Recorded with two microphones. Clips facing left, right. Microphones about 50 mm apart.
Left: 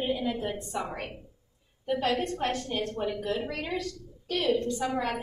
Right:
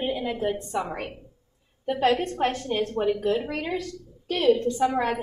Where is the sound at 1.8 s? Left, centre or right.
Right.